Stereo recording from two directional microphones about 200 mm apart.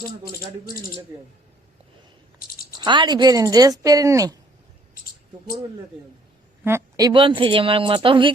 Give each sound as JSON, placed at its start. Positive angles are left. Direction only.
{"t": 2.4, "sound": "a sound", "side_deg": 45}
{"t": 2.7, "sound": "a woman's voice", "side_deg": -25}
{"t": 6.7, "sound": "a woman's voice", "side_deg": -15}